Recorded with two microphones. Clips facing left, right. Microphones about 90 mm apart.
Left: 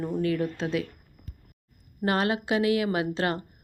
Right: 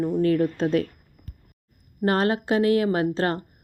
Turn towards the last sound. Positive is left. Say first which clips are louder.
# right 4 dB
turn(degrees=-40)  # may be behind; listen again after turning